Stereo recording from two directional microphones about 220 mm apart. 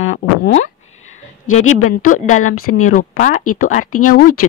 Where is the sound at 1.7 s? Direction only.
35° left (ahead or behind).